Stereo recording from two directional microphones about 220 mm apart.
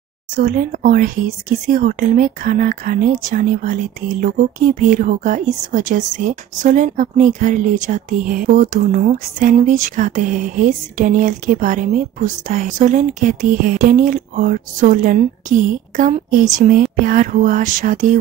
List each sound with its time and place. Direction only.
0.4 s speech: 40° right (ahead or behind)